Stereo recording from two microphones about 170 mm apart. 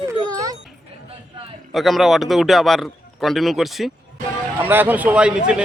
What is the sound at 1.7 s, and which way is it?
A man's voice, centre (ahead or behind).